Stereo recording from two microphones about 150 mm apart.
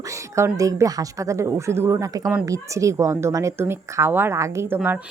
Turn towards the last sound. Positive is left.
turn(degrees=-15)  # may be behind; listen again after turning